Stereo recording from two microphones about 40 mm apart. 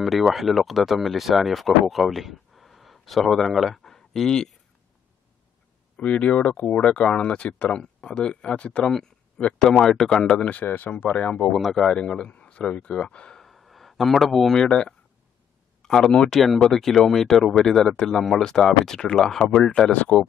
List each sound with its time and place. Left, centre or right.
0.0 s speech: centre
5.9 s speech: left
8.8 s speech: centre
10.2 s speech: left
10.5 s speech: left
11.1 s speech: left
11.8 s a man's voice: centre
12.3 s a sound: left
12.7 s speech: left
13.4 s a sound: centre
14.6 s speech: left
16.3 s speech: centre